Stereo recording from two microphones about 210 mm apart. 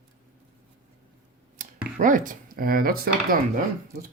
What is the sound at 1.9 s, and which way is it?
Speech, 40° right (ahead or behind).